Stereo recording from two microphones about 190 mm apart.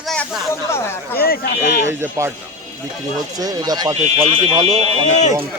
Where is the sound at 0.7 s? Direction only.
15° left (ahead or behind).